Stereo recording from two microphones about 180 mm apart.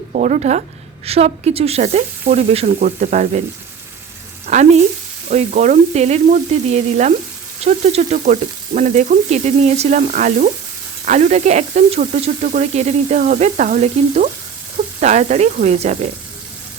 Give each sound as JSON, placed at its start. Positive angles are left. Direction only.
{"t": 0.1, "sound": "frying", "side_deg": -45}
{"t": 1.0, "sound": "sizzle", "side_deg": -35}
{"t": 4.4, "sound": "frying", "side_deg": -40}
{"t": 5.3, "sound": "sizzle", "side_deg": -40}
{"t": 7.6, "sound": "frying", "side_deg": -40}
{"t": 11.0, "sound": "sizzle", "side_deg": -40}